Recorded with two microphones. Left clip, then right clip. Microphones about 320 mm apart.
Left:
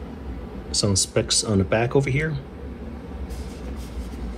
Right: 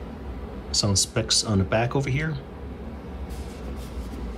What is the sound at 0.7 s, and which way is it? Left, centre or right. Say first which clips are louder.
Speech: left 1 dB; centre.